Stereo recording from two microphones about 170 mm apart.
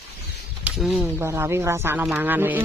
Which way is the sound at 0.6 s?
Centre (ahead or behind).